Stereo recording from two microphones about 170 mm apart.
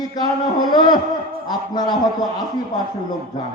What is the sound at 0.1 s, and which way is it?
A man's voice, 25° left (ahead or behind).